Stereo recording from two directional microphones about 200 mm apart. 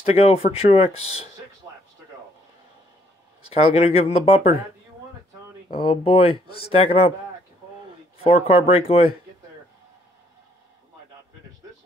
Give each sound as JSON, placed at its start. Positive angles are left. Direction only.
{"t": 0.0, "sound": "speech", "side_deg": 30}
{"t": 3.4, "sound": "speech", "side_deg": 30}
{"t": 5.8, "sound": "speech", "side_deg": 25}
{"t": 8.2, "sound": "speech", "side_deg": 30}